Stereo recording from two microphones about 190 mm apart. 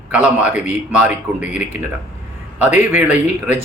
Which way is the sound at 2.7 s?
40° left (ahead or behind).